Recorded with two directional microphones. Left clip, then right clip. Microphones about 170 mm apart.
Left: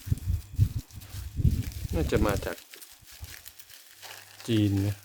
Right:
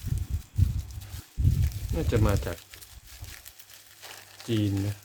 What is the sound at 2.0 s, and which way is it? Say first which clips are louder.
Speech: left 1 dB; 90° left.